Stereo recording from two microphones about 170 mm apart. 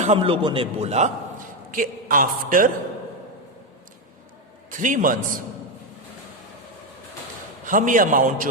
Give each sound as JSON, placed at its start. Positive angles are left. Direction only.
{"t": 0.0, "sound": "a man's voice", "side_deg": -35}
{"t": 4.7, "sound": "a man's voice", "side_deg": -50}
{"t": 7.6, "sound": "a man's voice", "side_deg": -50}